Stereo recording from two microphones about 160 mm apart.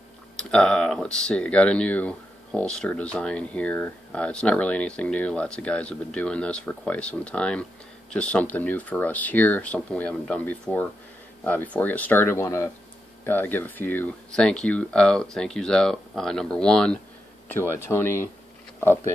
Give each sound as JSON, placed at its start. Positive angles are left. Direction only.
{"t": 0.4, "sound": "speech", "side_deg": 5}